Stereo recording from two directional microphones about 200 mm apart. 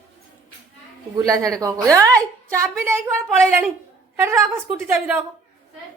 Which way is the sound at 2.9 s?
Centre (ahead or behind).